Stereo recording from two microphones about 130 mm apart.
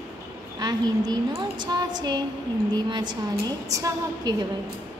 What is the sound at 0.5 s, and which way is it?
A woman's voice, 35° right (ahead or behind).